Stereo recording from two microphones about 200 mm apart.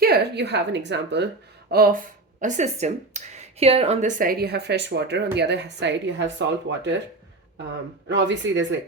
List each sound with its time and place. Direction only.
0.0 s a woman's voice: 55° right (ahead or behind)
1.7 s speech: 45° right (ahead or behind); by 6.9 s 60° right (ahead or behind)
8.1 s speech: 65° right (ahead or behind)